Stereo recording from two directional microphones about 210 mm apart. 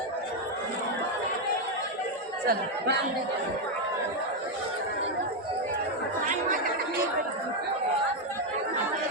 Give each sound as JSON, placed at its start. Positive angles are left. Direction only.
{"t": 2.5, "sound": "speech", "side_deg": -50}